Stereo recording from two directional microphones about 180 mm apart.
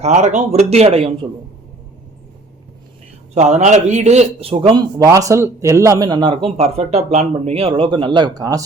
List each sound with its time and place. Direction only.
0.0 s speech: 40° right (ahead or behind)
3.3 s a man's voice: 40° right (ahead or behind); by 8.6 s 20° right (ahead or behind)